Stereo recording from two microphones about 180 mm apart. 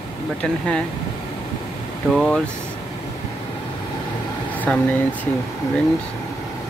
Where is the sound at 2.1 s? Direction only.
5° left (ahead or behind).